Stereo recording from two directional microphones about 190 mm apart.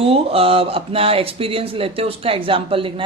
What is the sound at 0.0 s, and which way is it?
Speech, 30° right (ahead or behind).